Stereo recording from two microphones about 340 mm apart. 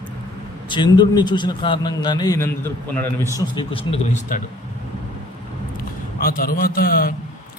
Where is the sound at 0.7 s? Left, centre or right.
Centre.